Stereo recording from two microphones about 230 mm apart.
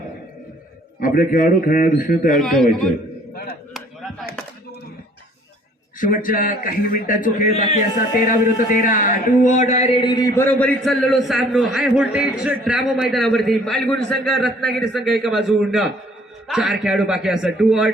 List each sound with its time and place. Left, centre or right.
0.9 s a man's voice: left
2.4 s a man's voice: centre
6.0 s a man's voice: left; by 17.9 s centre